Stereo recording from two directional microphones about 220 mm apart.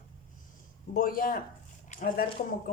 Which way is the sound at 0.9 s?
40° left (ahead or behind).